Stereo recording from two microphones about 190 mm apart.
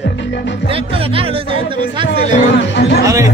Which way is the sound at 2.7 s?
65° left (ahead or behind).